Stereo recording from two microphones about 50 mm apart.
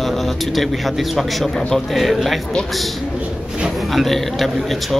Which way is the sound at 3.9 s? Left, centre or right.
Centre.